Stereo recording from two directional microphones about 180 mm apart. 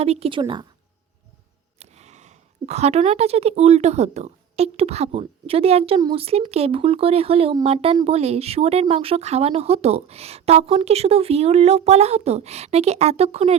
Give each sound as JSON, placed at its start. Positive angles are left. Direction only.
{"t": 0.0, "sound": "a woman's voice", "side_deg": -35}
{"t": 1.8, "sound": "speech", "side_deg": -40}